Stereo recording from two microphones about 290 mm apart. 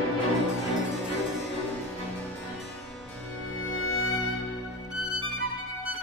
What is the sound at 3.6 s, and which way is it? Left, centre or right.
Music, left.